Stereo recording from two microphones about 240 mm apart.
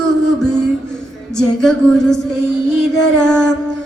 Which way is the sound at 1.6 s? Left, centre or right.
Centre.